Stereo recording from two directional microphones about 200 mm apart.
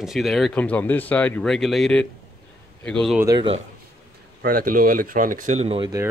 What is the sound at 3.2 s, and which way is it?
Speech, 15° right (ahead or behind).